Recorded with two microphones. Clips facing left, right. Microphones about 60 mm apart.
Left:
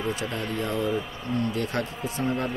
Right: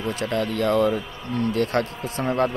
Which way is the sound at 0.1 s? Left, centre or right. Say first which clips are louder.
Right 5 dB; right.